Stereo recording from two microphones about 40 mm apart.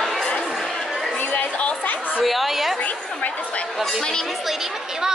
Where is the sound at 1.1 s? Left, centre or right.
Left.